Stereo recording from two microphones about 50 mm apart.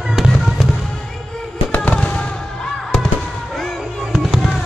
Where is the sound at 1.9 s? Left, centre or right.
Centre.